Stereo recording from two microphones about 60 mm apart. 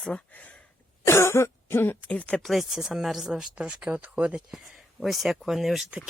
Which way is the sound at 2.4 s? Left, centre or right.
Centre.